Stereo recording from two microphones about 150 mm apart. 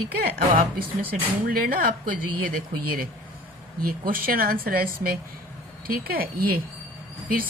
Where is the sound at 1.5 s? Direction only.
75° right (ahead or behind).